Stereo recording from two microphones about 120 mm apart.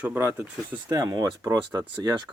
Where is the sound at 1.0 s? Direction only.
35° right (ahead or behind).